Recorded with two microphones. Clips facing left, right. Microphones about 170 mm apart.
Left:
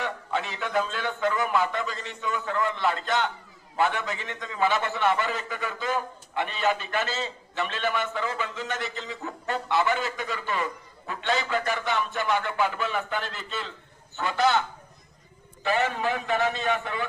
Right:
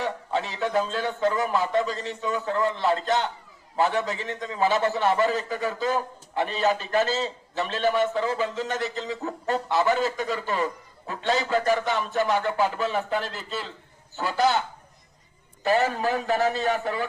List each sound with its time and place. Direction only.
0.0 s a man's voice: 35° right (ahead or behind)
15.6 s a man's voice: 40° right (ahead or behind)